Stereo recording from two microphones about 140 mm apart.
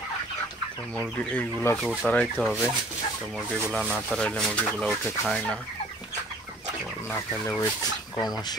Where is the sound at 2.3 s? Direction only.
5° right (ahead or behind).